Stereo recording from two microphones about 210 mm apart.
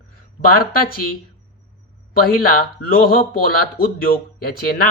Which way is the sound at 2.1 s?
45° left (ahead or behind).